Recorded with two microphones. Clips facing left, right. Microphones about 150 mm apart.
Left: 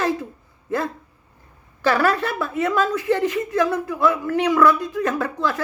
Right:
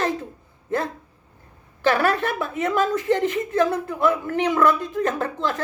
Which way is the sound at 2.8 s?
50° right (ahead or behind).